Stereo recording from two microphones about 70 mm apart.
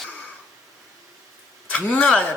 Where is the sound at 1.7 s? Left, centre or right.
Centre.